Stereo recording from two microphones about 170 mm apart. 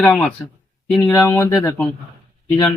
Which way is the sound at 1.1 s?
15° left (ahead or behind).